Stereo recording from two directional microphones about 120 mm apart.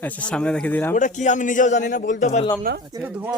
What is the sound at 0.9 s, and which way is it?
A man's voice, 90° left.